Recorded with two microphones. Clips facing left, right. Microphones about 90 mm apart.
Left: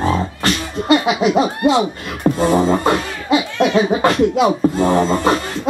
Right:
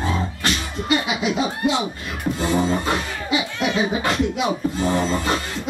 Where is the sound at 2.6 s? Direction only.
55° left (ahead or behind).